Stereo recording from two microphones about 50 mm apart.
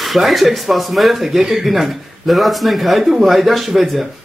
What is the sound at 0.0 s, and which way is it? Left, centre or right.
Speech, centre.